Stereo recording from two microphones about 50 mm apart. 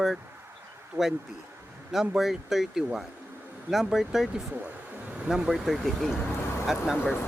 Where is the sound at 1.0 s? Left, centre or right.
Right.